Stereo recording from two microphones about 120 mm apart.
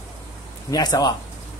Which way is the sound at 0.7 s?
30° left (ahead or behind).